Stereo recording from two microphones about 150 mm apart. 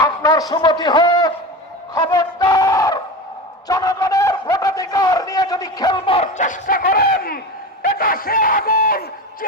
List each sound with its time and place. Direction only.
0.0 s a man's voice: 25° left (ahead or behind)
1.9 s a sound: 25° left (ahead or behind)
3.7 s a man's voice: 20° left (ahead or behind)
6.1 s speech: 55° left (ahead or behind); by 9.5 s 70° left (ahead or behind)